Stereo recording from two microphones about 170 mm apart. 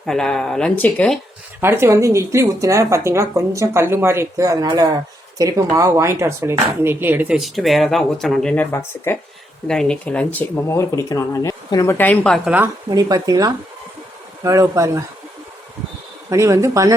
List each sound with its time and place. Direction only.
0.0 s speech: 5° left (ahead or behind)
1.6 s speech: 15° right (ahead or behind); by 12.4 s 5° left (ahead or behind)
12.5 s speech: 10° right (ahead or behind)
12.9 s speech: 20° right (ahead or behind)
16.3 s speech: 20° right (ahead or behind)